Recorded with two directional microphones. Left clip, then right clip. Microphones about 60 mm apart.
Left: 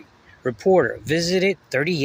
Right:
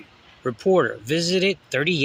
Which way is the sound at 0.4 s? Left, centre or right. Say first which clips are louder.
Left 2 dB; left.